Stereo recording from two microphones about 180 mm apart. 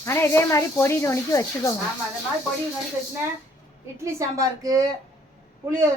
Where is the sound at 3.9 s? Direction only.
15° right (ahead or behind).